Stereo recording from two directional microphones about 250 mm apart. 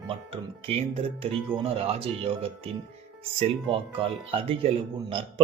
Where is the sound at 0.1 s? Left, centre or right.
Right.